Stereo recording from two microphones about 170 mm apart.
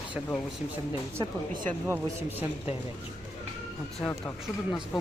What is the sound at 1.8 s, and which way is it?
Speech, 10° right (ahead or behind).